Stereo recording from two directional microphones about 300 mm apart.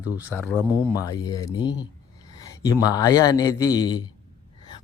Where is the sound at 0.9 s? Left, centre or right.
Centre.